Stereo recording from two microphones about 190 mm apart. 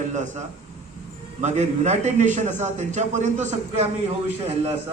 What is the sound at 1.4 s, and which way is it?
A man's voice, 35° right (ahead or behind).